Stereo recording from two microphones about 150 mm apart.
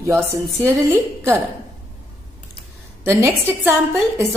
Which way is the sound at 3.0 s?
15° right (ahead or behind).